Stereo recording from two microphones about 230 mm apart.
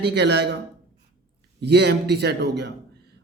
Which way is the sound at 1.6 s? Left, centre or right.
Right.